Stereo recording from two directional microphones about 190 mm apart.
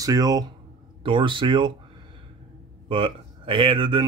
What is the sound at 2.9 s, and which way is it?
Speech, 30° right (ahead or behind).